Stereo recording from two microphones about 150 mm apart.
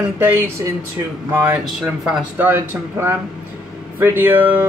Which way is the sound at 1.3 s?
10° right (ahead or behind).